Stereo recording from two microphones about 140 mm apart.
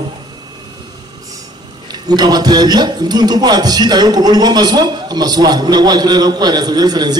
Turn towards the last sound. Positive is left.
turn(degrees=-30)  # may be behind; listen again after turning